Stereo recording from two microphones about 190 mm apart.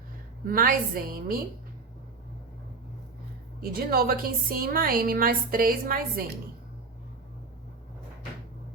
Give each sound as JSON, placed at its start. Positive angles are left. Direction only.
{"t": 0.4, "sound": "a woman's voice", "side_deg": -50}
{"t": 3.6, "sound": "a woman's voice", "side_deg": -50}